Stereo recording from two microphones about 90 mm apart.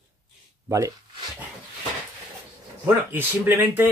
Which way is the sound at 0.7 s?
35° right (ahead or behind).